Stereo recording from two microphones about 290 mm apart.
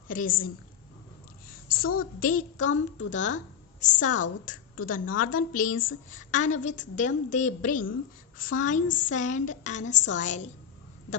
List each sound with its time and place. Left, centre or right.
0.1 s a woman's voice: left
1.5 s a sound: left
2.0 s a woman's voice: left